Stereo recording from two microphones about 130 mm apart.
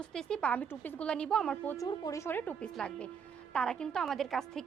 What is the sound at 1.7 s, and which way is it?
A woman's voice, 25° left (ahead or behind).